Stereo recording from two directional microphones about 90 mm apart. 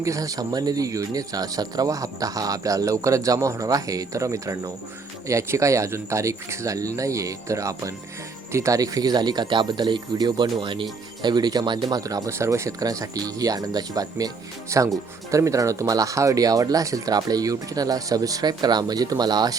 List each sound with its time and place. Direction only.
0.0 s speech: 40° right (ahead or behind); by 10.8 s 70° right (ahead or behind)
11.2 s speech: 50° right (ahead or behind)
14.7 s speech: 35° right (ahead or behind); by 19.5 s 50° right (ahead or behind)